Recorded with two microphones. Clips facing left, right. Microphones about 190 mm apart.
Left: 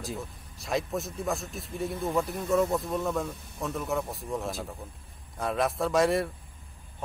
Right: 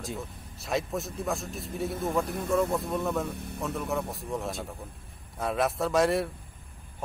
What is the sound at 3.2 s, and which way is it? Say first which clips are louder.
Speech: right 3 dB; 65° right (ahead or behind).